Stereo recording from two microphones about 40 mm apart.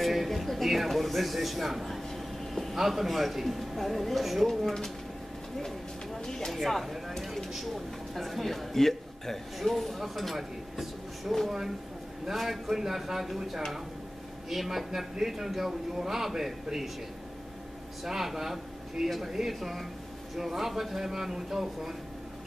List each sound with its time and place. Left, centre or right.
0.0 s a sound: centre
2.8 s a man's voice: centre
6.1 s speech: centre
6.6 s a man's voice: centre
18.0 s a man's voice: centre